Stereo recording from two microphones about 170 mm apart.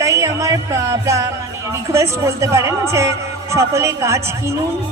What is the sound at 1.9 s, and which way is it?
Speech, 15° right (ahead or behind).